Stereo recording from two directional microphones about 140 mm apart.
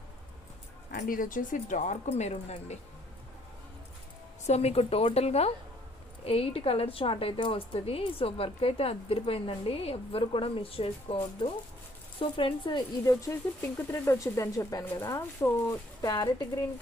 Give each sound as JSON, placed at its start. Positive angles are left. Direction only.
{"t": 0.9, "sound": "speech", "side_deg": 80}
{"t": 4.4, "sound": "a woman's voice", "side_deg": 50}
{"t": 13.1, "sound": "speech", "side_deg": 20}